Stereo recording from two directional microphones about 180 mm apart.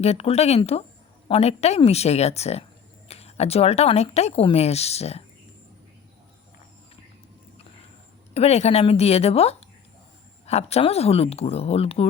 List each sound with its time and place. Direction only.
0.0 s speech: 35° left (ahead or behind)
8.3 s speech: 35° left (ahead or behind)